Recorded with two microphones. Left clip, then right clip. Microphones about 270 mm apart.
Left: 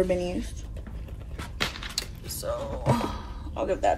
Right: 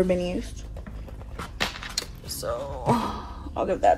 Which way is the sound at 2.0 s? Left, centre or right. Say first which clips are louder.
Right 2 dB; right.